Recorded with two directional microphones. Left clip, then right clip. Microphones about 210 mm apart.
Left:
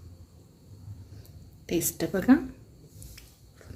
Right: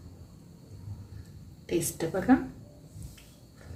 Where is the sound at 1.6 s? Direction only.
50° left (ahead or behind).